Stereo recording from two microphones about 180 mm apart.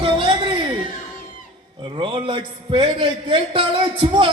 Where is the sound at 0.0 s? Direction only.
30° right (ahead or behind).